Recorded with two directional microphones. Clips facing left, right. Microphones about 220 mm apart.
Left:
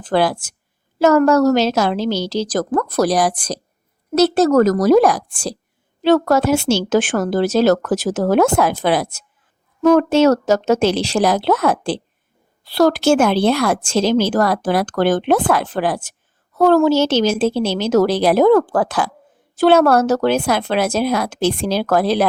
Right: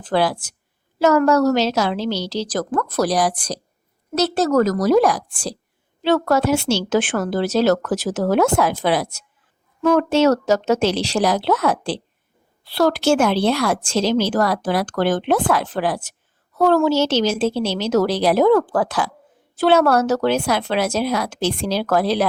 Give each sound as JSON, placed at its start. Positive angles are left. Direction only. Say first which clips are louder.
{"t": 0.0, "sound": "a woman's voice", "louder": "left 2 dB", "side_deg": 50}